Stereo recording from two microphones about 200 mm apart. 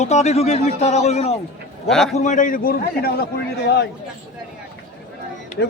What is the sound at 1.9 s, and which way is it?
Speech, centre (ahead or behind).